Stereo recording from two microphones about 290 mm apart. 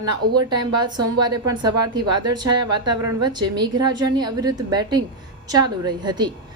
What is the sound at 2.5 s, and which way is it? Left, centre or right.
Speech, right.